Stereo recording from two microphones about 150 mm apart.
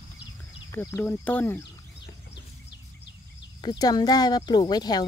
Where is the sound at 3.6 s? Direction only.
30° left (ahead or behind).